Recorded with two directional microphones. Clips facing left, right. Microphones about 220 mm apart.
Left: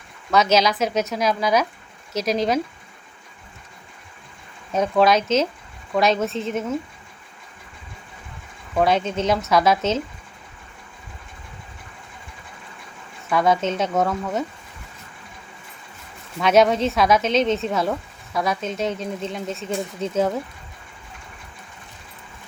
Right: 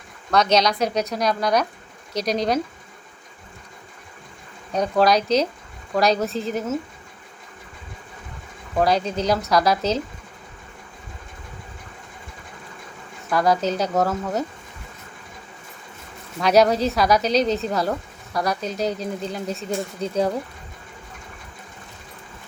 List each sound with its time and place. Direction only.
0.3 s speech: 5° left (ahead or behind)
4.7 s speech: centre (ahead or behind)
8.8 s speech: centre (ahead or behind)
13.3 s speech: centre (ahead or behind)
16.4 s speech: centre (ahead or behind)